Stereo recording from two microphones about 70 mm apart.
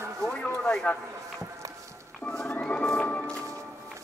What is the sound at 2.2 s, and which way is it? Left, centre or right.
Music, centre.